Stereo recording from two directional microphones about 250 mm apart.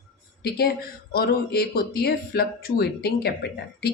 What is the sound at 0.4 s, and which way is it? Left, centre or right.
Speech, left.